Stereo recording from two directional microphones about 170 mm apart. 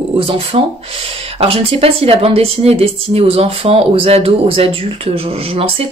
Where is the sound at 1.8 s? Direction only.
35° right (ahead or behind).